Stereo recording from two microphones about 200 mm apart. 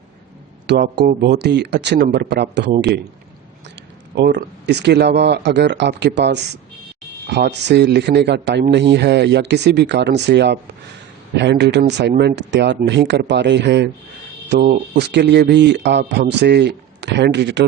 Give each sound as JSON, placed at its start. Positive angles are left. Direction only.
{"t": 0.7, "sound": "speech", "side_deg": -55}
{"t": 4.1, "sound": "speech", "side_deg": -55}